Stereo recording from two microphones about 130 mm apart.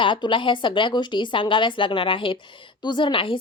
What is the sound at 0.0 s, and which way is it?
A woman's voice, 40° left (ahead or behind).